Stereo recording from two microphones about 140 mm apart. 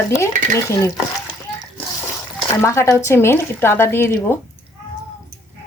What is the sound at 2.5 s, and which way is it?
Speech, 20° left (ahead or behind).